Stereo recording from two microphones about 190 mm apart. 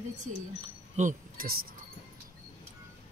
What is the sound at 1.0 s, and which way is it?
Speech, 45° right (ahead or behind).